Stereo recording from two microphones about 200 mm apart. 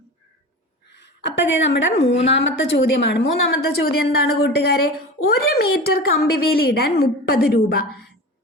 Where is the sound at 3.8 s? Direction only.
50° left (ahead or behind).